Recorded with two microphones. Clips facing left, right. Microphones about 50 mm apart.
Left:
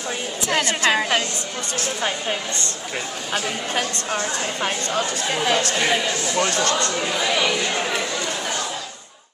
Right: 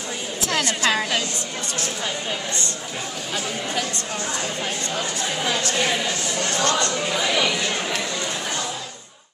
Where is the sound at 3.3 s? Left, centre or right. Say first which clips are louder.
Left 3 dB; left.